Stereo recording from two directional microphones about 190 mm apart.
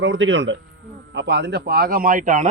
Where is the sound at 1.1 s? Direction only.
65° right (ahead or behind); by 2.4 s 45° right (ahead or behind).